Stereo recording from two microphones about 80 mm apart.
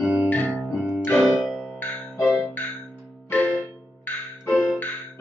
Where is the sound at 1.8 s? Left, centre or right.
Left.